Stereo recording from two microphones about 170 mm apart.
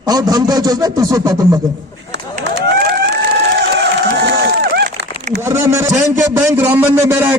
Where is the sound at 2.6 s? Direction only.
75° right (ahead or behind).